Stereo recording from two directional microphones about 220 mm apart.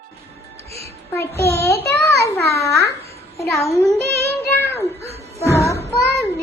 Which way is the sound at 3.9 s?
10° right (ahead or behind).